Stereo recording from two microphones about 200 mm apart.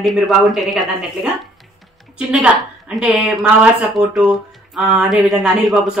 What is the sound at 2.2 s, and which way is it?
A woman's voice, 5° right (ahead or behind).